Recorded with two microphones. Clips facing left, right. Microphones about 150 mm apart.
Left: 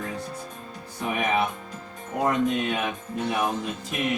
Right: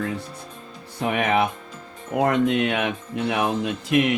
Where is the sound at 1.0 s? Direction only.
80° right.